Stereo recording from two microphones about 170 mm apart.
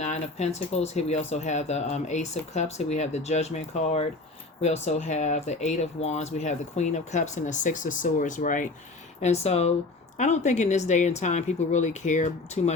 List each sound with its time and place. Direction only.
0.0 s speech: 40° left (ahead or behind)
9.2 s speech: 40° left (ahead or behind)